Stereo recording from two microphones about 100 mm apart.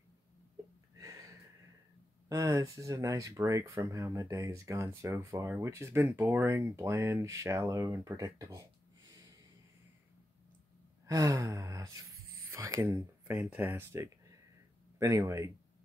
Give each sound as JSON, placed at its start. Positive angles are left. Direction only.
{"t": 0.9, "sound": "a sound", "side_deg": -30}
{"t": 2.2, "sound": "speech", "side_deg": -35}
{"t": 11.1, "sound": "speech", "side_deg": -35}